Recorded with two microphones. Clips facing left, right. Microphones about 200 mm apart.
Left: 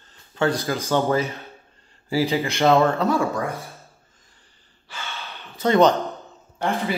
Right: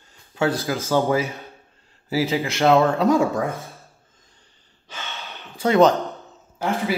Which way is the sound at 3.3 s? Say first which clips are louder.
Right 2 dB; centre (ahead or behind).